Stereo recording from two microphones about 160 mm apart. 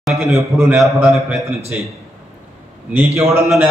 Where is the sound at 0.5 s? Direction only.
15° right (ahead or behind).